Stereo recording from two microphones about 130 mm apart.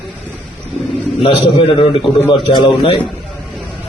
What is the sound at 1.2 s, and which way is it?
A man's voice, 40° left (ahead or behind).